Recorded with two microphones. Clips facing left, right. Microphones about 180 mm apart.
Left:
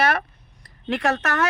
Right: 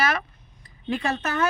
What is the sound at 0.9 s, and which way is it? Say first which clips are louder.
Speech: left 3 dB; 80° left.